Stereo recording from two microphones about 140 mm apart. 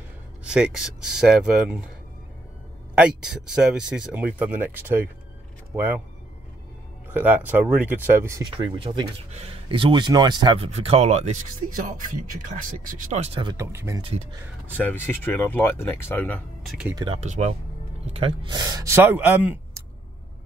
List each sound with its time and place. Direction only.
0.4 s speech: 5° right (ahead or behind)
2.9 s speech: 5° right (ahead or behind)
7.1 s speech: 10° right (ahead or behind)
8.5 s speech: 35° right (ahead or behind)
10.6 s speech: 45° right (ahead or behind)
11.7 s speech: 70° right (ahead or behind)
13.2 s speech: 40° right (ahead or behind)
13.6 s speech: 20° right (ahead or behind)
14.8 s speech: 15° left (ahead or behind)
16.6 s speech: 5° right (ahead or behind)
16.9 s speech: 30° right (ahead or behind)
17.2 s speech: 50° right (ahead or behind)
18.1 s speech: 40° right (ahead or behind); by 19.6 s 10° right (ahead or behind)